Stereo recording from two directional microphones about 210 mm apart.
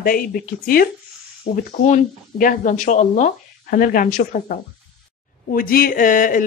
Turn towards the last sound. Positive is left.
turn(degrees=40)  # may be behind; listen again after turning